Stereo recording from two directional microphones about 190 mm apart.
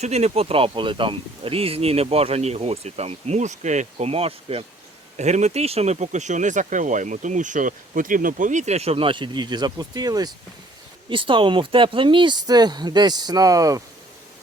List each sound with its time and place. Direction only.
0.0 s speech: 35° right (ahead or behind); by 13.8 s 15° right (ahead or behind)